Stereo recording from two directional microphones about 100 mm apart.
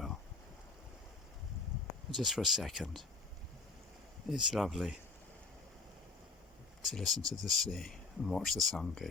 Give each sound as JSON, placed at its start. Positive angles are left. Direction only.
{"t": 2.0, "sound": "speech", "side_deg": 0}
{"t": 4.3, "sound": "speech", "side_deg": -5}
{"t": 6.8, "sound": "speech", "side_deg": 0}
{"t": 7.2, "sound": "speech", "side_deg": -40}
{"t": 7.4, "sound": "speech", "side_deg": 5}